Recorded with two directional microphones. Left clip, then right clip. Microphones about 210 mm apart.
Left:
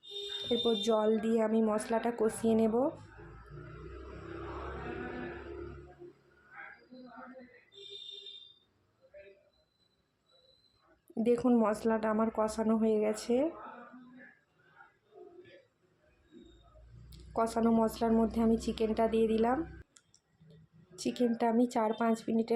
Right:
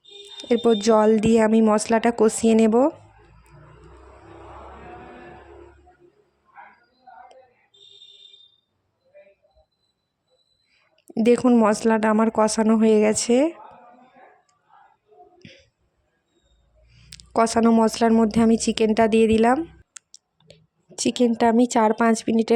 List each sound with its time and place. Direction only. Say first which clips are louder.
0.4 s speech: right 12 dB; 50° right (ahead or behind)
11.1 s speech: right 11 dB; 45° right (ahead or behind)
15.4 s a sound: right 9 dB; 45° right (ahead or behind)
17.1 s speech: right 12 dB; 50° right (ahead or behind)